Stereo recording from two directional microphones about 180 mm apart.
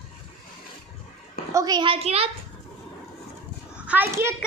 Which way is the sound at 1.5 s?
20° right (ahead or behind).